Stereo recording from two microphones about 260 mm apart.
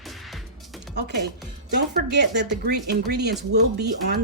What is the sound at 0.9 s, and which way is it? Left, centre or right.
Speech, right.